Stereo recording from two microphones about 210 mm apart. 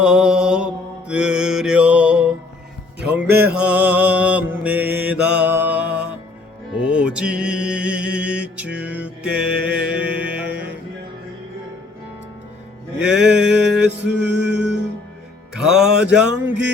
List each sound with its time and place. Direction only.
0.0 s mantra: 5° right (ahead or behind)
3.0 s music: 5° right (ahead or behind)
3.2 s mantra: 50° right (ahead or behind)
3.5 s mantra: 5° right (ahead or behind)
6.8 s music: 5° right (ahead or behind)
13.0 s a sound: 5° right (ahead or behind)
13.5 s music: 55° right (ahead or behind)
14.6 s music: 5° right (ahead or behind)
16.0 s a sound: 5° right (ahead or behind)